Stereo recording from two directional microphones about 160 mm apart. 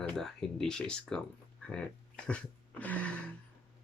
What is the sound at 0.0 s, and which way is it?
Speech, 5° left (ahead or behind).